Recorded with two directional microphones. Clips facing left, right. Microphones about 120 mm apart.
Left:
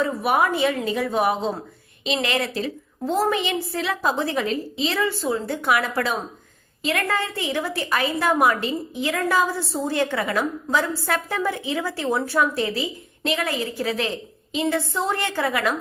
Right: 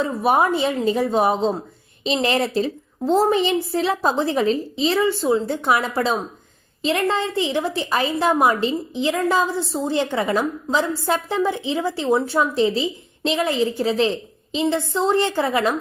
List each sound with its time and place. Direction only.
0.0 s a woman's voice: 30° right (ahead or behind)